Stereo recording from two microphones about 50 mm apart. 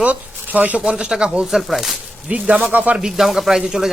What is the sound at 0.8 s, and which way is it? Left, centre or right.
Speech, centre.